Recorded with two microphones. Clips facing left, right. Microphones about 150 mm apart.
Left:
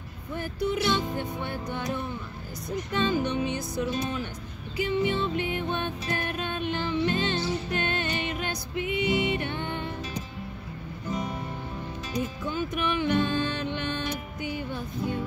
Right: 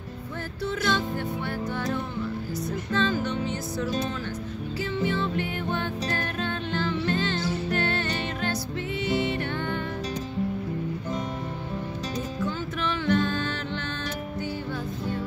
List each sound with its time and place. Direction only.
0.8 s music: 20° left (ahead or behind)
2.7 s music: 15° left (ahead or behind)
12.4 s music: 15° left (ahead or behind)